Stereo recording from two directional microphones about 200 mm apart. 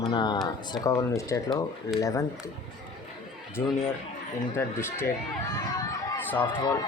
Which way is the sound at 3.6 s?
10° left (ahead or behind).